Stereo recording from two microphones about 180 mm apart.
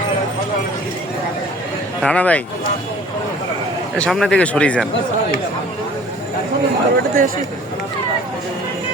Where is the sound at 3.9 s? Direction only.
5° left (ahead or behind).